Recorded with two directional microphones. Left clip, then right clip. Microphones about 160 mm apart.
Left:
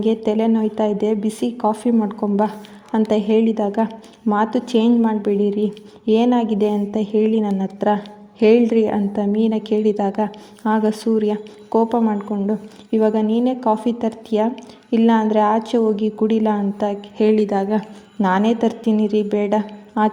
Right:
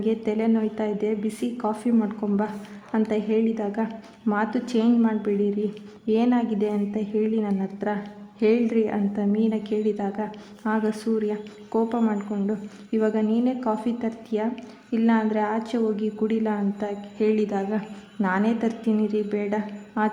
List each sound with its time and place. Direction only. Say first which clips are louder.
0.3 s a woman's voice: left 6 dB; 35° left (ahead or behind)